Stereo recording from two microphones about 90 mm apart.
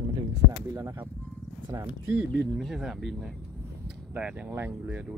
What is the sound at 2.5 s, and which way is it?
Speech, 5° right (ahead or behind).